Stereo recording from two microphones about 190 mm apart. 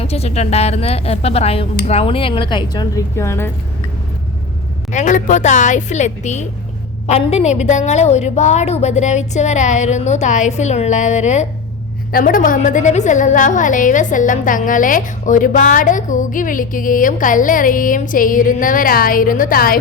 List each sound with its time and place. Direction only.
0.0 s a woman's voice: 35° left (ahead or behind); by 3.5 s 15° left (ahead or behind)
4.9 s a woman's voice: 40° left (ahead or behind)